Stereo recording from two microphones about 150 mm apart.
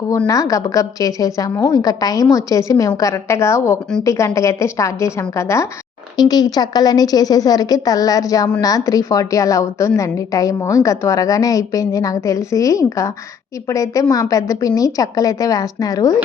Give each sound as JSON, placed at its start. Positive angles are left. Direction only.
{"t": 0.3, "sound": "a woman's voice", "side_deg": 20}